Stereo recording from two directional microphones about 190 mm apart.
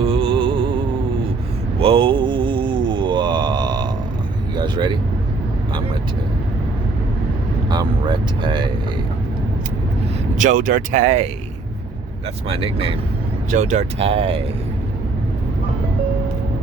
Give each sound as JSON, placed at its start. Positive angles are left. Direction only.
{"t": 0.0, "sound": "music", "side_deg": -30}
{"t": 1.8, "sound": "mantra", "side_deg": -30}
{"t": 4.5, "sound": "vehicle", "side_deg": -25}
{"t": 7.7, "sound": "vehicle", "side_deg": -25}
{"t": 10.4, "sound": "speech", "side_deg": -45}
{"t": 12.5, "sound": "speech", "side_deg": -30}
{"t": 13.5, "sound": "speech", "side_deg": -40}